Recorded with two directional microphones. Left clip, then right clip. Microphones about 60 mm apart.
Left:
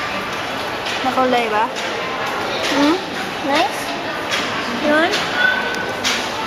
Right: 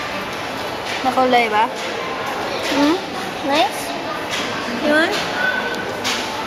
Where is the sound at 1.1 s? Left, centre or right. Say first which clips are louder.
Right 2 dB; right.